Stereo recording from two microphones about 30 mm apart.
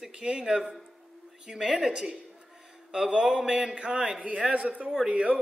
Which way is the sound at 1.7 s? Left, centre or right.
Right.